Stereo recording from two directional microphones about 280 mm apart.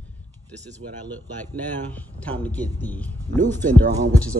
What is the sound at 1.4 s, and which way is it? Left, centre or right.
A man's voice, centre.